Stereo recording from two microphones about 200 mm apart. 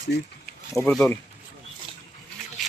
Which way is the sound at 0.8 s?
5° left (ahead or behind).